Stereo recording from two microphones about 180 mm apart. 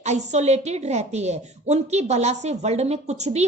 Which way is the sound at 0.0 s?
40° right (ahead or behind).